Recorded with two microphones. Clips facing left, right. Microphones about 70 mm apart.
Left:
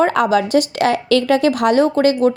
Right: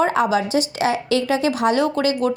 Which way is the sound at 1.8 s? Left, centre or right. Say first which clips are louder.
Left 5 dB; left.